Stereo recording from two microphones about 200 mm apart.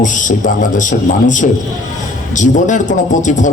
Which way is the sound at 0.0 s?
40° left (ahead or behind).